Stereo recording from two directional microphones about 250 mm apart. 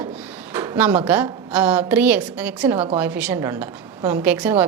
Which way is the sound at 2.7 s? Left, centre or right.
Right.